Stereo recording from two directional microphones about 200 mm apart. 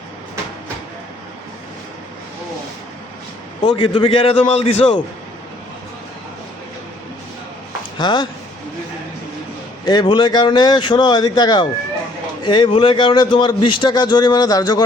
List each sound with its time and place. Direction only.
3.6 s speech: 25° left (ahead or behind)
7.9 s speech: 20° left (ahead or behind)
9.8 s speech: 20° left (ahead or behind)